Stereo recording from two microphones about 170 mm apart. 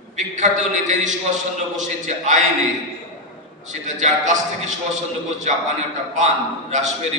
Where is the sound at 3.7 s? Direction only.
45° right (ahead or behind).